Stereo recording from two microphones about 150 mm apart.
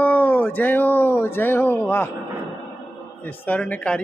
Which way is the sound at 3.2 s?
10° left (ahead or behind).